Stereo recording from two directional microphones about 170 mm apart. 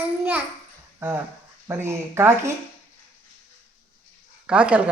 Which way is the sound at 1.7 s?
15° right (ahead or behind).